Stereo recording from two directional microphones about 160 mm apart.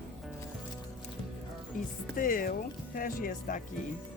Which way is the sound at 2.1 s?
60° left (ahead or behind).